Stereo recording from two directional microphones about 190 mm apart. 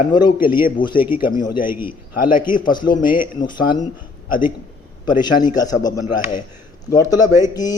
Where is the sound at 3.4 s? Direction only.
25° left (ahead or behind).